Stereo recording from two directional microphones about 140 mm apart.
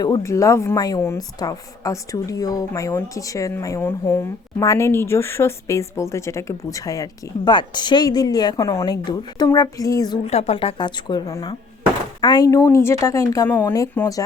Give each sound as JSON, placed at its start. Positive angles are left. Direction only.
{"t": 0.0, "sound": "a woman's voice", "side_deg": 25}
{"t": 10.2, "sound": "a woman's voice", "side_deg": 50}